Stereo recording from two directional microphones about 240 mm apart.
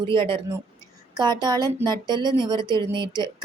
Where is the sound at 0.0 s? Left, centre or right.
Right.